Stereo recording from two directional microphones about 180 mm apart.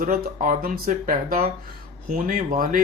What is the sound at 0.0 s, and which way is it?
Speech, 50° right (ahead or behind).